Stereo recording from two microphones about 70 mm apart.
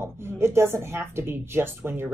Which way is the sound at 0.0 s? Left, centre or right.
Right.